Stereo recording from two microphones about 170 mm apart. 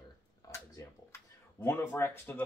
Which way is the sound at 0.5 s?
15° left (ahead or behind).